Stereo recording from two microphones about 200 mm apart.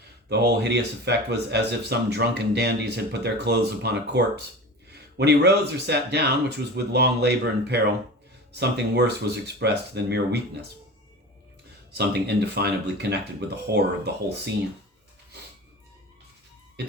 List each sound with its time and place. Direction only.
0.3 s speech: 55° right (ahead or behind)
11.9 s speech: 55° right (ahead or behind)